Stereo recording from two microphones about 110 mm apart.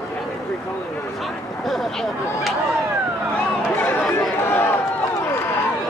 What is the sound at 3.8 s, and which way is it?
Chatter, 20° left (ahead or behind).